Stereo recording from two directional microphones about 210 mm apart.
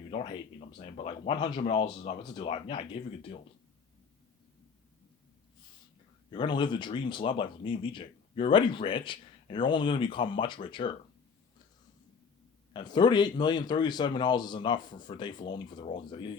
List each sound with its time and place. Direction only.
0.1 s speech: 35° left (ahead or behind)
6.3 s speech: 20° left (ahead or behind)
12.7 s speech: 20° left (ahead or behind)